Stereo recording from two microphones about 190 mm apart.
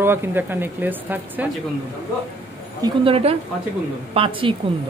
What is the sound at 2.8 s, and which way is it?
Speech, 30° right (ahead or behind).